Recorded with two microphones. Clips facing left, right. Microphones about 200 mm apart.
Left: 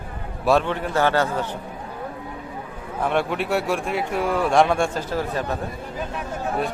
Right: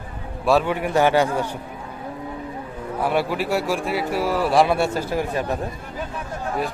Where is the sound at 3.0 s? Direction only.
5° right (ahead or behind).